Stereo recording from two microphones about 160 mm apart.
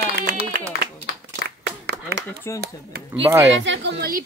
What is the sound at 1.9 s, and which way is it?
Chop, 90° right.